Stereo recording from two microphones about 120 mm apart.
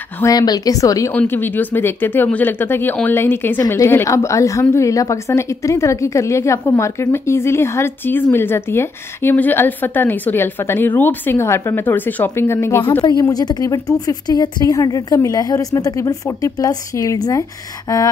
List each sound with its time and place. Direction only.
0.2 s a woman's voice: 30° left (ahead or behind)
1.1 s a woman's voice: 15° left (ahead or behind)
13.2 s a woman's voice: 35° left (ahead or behind)